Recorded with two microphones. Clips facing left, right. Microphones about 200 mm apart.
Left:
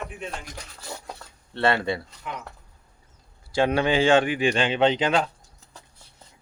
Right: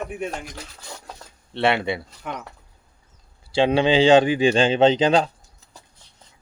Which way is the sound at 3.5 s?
30° right (ahead or behind).